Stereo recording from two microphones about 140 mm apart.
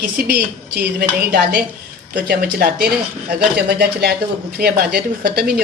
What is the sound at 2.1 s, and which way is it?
A woman's voice, 90° right.